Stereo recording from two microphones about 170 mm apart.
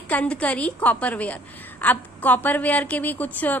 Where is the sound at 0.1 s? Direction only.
5° left (ahead or behind).